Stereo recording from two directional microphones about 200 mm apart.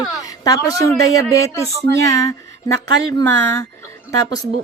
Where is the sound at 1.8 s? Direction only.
15° left (ahead or behind).